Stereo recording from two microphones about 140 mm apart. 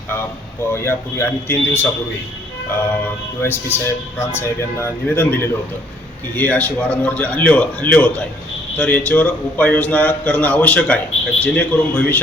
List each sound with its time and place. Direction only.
0.7 s speech: 15° left (ahead or behind)
3.4 s speech: 15° left (ahead or behind)